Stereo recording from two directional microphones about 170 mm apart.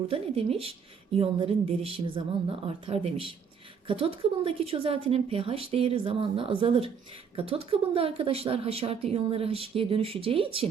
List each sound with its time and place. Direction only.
0.1 s a woman's voice: 35° right (ahead or behind)